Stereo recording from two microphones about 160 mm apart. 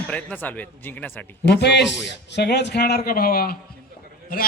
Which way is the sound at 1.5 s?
90° left.